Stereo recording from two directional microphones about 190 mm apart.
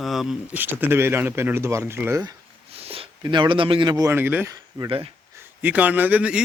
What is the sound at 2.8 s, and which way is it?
Speech, 30° right (ahead or behind).